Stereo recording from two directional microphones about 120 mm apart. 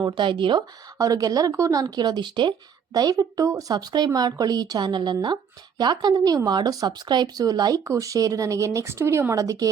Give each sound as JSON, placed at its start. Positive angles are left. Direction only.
{"t": 0.0, "sound": "speech", "side_deg": -40}
{"t": 0.9, "sound": "speech", "side_deg": -30}